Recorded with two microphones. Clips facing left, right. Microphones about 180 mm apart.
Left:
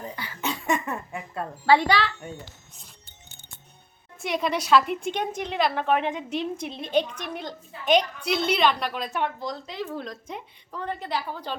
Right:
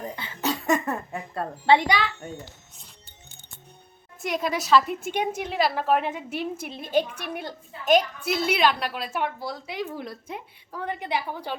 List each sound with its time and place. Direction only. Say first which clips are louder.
0.4 s a sound: right 3 dB; 40° right (ahead or behind)
1.6 s a woman's voice: even; 20° right (ahead or behind)
4.2 s a woman's voice: left 1 dB; centre (ahead or behind)